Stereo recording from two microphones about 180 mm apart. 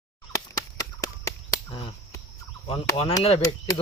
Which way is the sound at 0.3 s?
20° left (ahead or behind).